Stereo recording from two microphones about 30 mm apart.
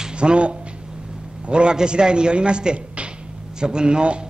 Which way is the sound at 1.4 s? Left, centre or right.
Right.